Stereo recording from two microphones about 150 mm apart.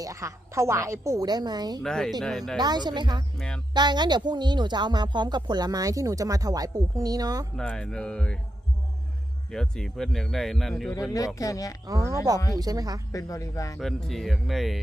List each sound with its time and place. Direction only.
0.0 s speech: 20° right (ahead or behind)
1.8 s speech: 5° left (ahead or behind)
2.6 s speech: 30° right (ahead or behind)
3.3 s speech: 5° left (ahead or behind)
3.8 s speech: 30° right (ahead or behind)
7.5 s speech: 5° left (ahead or behind)
9.5 s speech: 5° left (ahead or behind)
10.9 s speech: 20° left (ahead or behind)
11.9 s speech: 20° right (ahead or behind)
13.1 s speech: 20° left (ahead or behind)
13.7 s speech: centre (ahead or behind)